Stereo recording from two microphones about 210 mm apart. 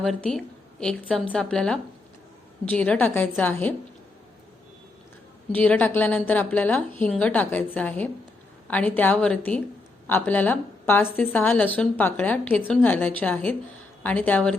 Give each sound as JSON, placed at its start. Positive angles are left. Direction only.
{"t": 0.0, "sound": "a woman's voice", "side_deg": 0}
{"t": 5.5, "sound": "a woman's voice", "side_deg": 5}